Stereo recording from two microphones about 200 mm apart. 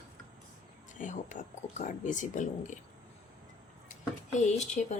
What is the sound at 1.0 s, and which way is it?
Speech, 40° left (ahead or behind).